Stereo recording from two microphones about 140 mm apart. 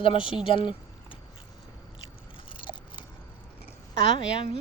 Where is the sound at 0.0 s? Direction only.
40° left (ahead or behind).